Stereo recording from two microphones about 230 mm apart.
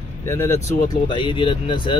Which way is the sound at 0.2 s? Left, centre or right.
Centre.